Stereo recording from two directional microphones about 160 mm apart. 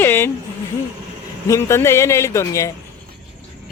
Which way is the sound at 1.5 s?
15° left (ahead or behind).